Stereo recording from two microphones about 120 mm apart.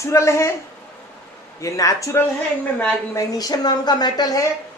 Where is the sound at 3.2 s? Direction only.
35° left (ahead or behind).